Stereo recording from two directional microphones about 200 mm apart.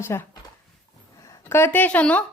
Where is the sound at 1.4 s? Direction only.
10° left (ahead or behind).